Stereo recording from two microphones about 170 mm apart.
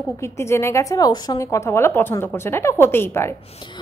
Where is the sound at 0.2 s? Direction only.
15° left (ahead or behind).